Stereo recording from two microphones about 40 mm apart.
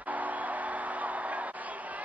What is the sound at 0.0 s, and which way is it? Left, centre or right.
Music, right.